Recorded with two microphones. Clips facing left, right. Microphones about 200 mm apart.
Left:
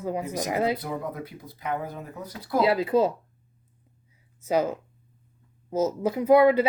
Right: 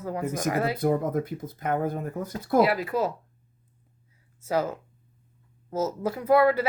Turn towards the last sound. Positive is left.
turn(degrees=20)  # may be behind; listen again after turning